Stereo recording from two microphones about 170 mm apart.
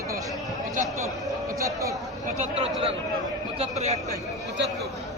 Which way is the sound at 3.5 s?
40° right (ahead or behind).